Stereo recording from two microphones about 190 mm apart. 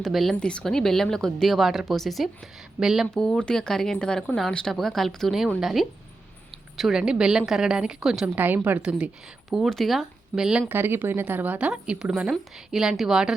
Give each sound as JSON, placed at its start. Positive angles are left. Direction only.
{"t": 0.0, "sound": "speech", "side_deg": 0}